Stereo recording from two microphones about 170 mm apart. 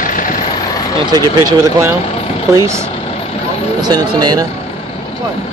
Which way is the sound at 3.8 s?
25° right (ahead or behind).